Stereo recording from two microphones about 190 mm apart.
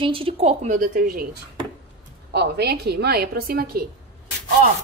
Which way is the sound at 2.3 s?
60° right (ahead or behind).